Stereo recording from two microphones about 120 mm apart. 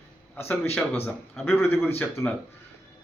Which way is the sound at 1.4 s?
20° left (ahead or behind).